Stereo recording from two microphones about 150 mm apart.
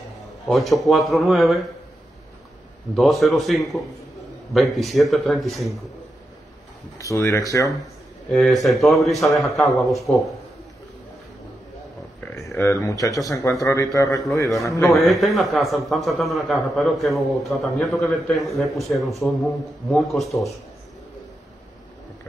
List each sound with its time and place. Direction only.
0.5 s a man's voice: centre (ahead or behind)
3.0 s a man's voice: centre (ahead or behind)
7.0 s speech: 20° left (ahead or behind)
8.3 s a man's voice: centre (ahead or behind)
12.4 s speech: 20° left (ahead or behind)
14.9 s a man's voice: centre (ahead or behind)